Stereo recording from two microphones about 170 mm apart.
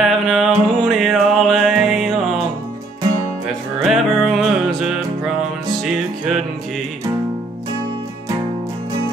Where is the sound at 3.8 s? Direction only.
Centre (ahead or behind).